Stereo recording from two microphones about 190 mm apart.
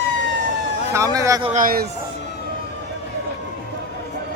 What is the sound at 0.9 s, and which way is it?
Speech, 15° right (ahead or behind).